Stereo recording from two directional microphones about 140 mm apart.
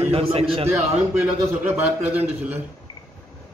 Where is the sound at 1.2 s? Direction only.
10° right (ahead or behind).